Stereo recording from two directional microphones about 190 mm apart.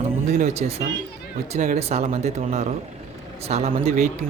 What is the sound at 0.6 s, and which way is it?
Speech, 40° right (ahead or behind).